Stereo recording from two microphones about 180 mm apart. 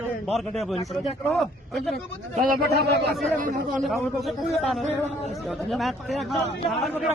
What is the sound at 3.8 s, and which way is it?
Speech, centre (ahead or behind).